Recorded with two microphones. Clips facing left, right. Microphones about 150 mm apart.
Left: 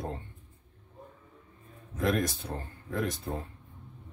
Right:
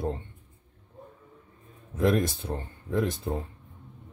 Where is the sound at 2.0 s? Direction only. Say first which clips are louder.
Right 4 dB; 25° right (ahead or behind).